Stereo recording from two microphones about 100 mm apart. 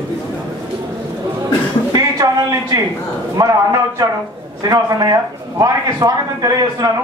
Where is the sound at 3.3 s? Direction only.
35° right (ahead or behind).